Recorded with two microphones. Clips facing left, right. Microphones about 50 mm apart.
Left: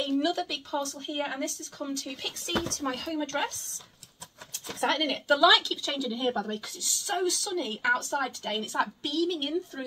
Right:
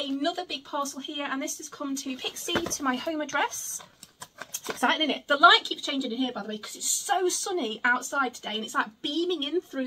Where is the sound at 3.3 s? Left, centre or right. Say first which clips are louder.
Right 5 dB; right.